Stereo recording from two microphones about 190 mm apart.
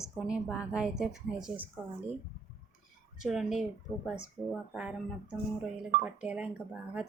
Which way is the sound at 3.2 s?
Centre (ahead or behind).